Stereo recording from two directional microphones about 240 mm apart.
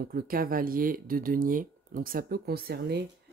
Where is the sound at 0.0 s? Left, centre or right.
Right.